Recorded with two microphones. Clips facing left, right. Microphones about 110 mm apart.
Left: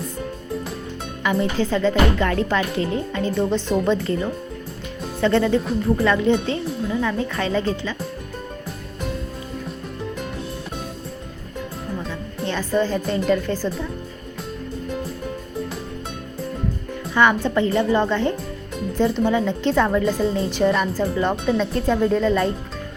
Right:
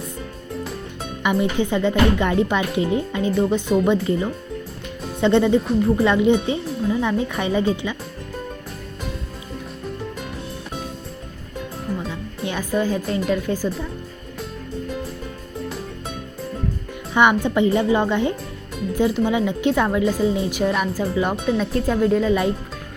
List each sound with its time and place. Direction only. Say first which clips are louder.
1.2 s speech: right 1 dB; 15° right (ahead or behind)
12.0 s speech: left 1 dB; 10° right (ahead or behind)
17.2 s speech: right 1 dB; 15° right (ahead or behind)